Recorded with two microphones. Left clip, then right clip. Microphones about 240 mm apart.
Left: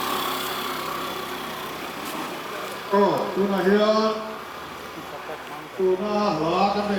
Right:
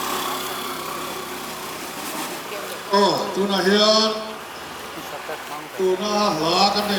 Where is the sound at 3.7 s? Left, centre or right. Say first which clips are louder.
Right 4 dB; left.